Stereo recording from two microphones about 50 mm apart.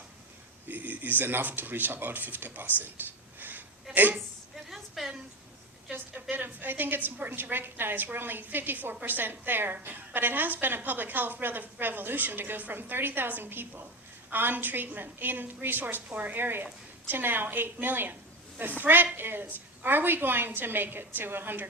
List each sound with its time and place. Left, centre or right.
0.7 s speech: right
3.9 s a woman's voice: centre
6.3 s a woman's voice: right